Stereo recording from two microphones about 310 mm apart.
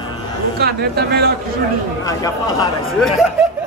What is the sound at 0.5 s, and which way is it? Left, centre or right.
Speech, right.